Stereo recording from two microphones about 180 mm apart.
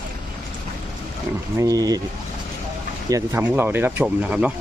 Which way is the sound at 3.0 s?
15° right (ahead or behind).